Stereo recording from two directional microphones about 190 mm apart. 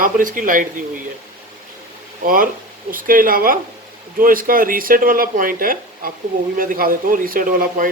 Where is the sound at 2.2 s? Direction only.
45° right (ahead or behind).